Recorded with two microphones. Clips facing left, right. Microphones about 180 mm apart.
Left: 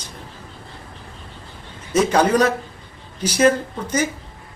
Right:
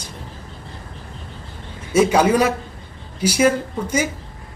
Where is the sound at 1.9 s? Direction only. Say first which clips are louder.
Right 1 dB; 10° right (ahead or behind).